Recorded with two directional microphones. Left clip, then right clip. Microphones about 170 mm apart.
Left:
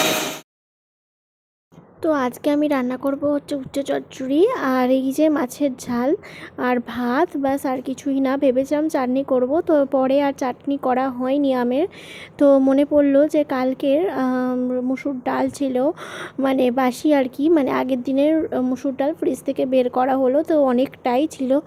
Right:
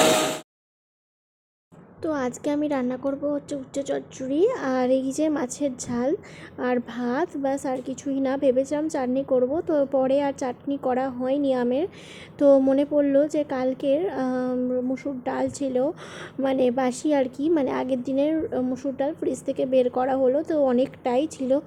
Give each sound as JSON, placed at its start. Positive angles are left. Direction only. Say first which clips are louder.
{"t": 2.0, "sound": "a woman's voice", "louder": "left 7 dB", "side_deg": 15}